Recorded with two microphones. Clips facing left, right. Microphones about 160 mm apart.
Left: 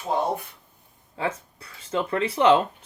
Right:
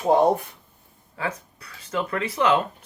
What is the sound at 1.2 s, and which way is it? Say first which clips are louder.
Speech: left 2 dB; 25° left (ahead or behind).